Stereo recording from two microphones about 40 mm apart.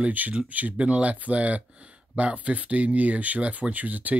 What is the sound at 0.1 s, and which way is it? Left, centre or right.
Speech, right.